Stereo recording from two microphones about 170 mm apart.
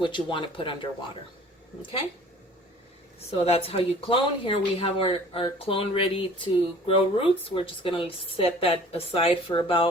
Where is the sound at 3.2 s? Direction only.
35° left (ahead or behind).